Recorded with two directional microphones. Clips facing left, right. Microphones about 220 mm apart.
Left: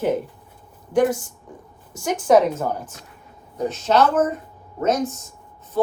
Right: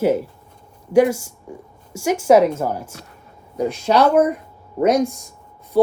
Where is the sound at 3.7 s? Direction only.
10° right (ahead or behind).